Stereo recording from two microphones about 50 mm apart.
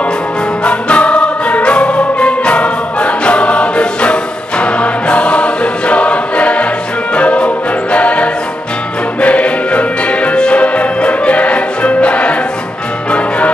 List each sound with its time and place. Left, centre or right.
0.7 s music: left